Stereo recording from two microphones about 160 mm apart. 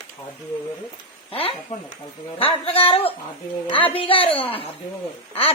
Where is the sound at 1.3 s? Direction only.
35° left (ahead or behind).